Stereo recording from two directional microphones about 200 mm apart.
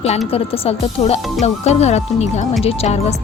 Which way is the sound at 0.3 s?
30° left (ahead or behind).